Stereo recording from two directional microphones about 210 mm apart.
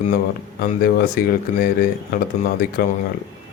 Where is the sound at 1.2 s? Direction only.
45° left (ahead or behind).